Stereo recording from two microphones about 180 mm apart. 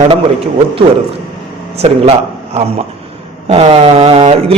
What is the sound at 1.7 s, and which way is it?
A man's voice, 35° right (ahead or behind).